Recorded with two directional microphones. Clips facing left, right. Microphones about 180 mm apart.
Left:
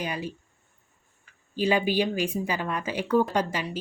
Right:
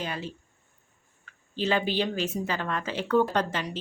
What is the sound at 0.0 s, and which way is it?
Speech, 10° left (ahead or behind).